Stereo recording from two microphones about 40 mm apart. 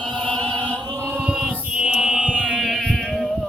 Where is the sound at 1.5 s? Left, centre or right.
Right.